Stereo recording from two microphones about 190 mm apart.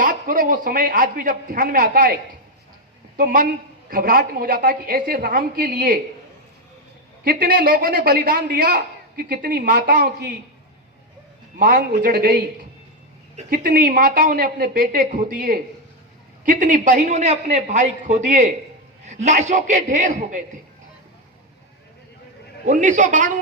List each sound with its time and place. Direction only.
0.0 s a man's voice: 45° right (ahead or behind)
3.2 s a man's voice: 45° right (ahead or behind)
7.3 s a man's voice: 45° right (ahead or behind)
11.6 s a man's voice: 45° right (ahead or behind)
22.6 s a woman's voice: 40° right (ahead or behind)